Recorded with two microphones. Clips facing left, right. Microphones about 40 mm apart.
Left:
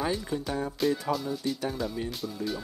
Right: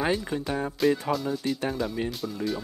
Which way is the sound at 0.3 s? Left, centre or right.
Right.